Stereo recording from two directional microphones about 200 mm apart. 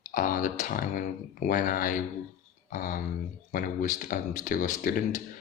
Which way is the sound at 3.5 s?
40° left (ahead or behind).